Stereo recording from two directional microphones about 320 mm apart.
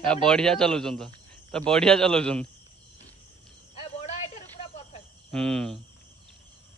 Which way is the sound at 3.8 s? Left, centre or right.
Left.